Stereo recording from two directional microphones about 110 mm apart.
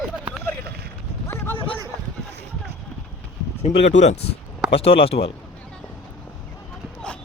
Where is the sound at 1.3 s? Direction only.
25° left (ahead or behind).